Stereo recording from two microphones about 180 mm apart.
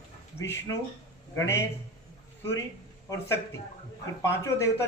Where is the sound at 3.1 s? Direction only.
15° left (ahead or behind).